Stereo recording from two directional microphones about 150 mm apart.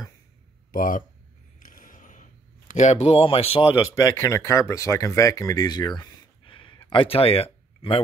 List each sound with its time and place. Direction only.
0.7 s speech: 65° left (ahead or behind)
1.6 s a sound: 65° left (ahead or behind)
2.7 s speech: 50° left (ahead or behind)
3.7 s speech: 20° left (ahead or behind); by 8.0 s 40° left (ahead or behind)